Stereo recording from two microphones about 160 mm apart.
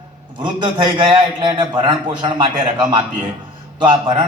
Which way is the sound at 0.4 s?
30° right (ahead or behind).